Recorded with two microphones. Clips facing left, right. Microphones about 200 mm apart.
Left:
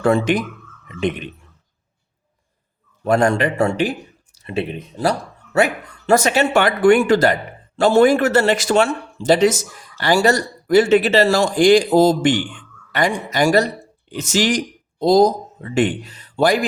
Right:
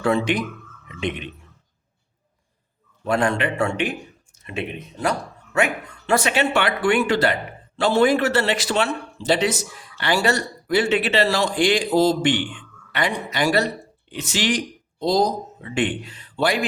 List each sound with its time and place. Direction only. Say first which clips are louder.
0.0 s a man's voice: left 4 dB; 45° left (ahead or behind)
0.9 s a sound: left 5 dB; 45° left (ahead or behind)
3.0 s a man's voice: left 5 dB; 45° left (ahead or behind)